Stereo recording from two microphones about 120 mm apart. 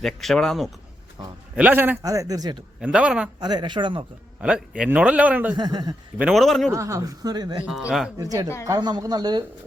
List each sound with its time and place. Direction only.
0.0 s speech: 5° left (ahead or behind)
1.5 s a man's voice: 15° right (ahead or behind)
2.0 s a woman's voice: 30° right (ahead or behind)
2.8 s a man's voice: 10° right (ahead or behind)
3.4 s a woman's voice: 40° right (ahead or behind)
4.4 s a man's voice: 10° right (ahead or behind)
5.5 s a woman's voice: 35° right (ahead or behind)
6.3 s speech: centre (ahead or behind)
6.7 s a woman's voice: 25° right (ahead or behind)
7.6 s speech: 5° right (ahead or behind)
8.2 s a woman's voice: 30° right (ahead or behind)